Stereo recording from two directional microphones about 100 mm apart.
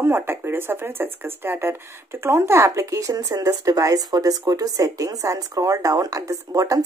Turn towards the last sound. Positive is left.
turn(degrees=-35)  # may be behind; listen again after turning